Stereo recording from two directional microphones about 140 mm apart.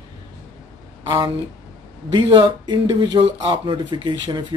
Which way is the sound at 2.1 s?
35° right (ahead or behind).